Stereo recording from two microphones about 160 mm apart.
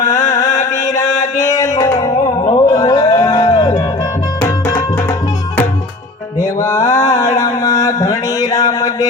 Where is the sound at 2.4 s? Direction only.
35° left (ahead or behind).